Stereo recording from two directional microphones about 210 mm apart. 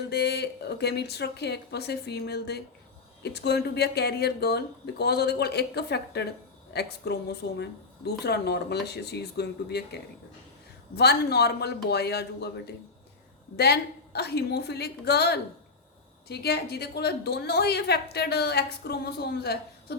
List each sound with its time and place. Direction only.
0.1 s a woman's voice: 50° left (ahead or behind)